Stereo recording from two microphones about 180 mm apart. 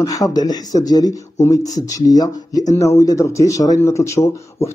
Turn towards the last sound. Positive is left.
turn(degrees=15)  # may be behind; listen again after turning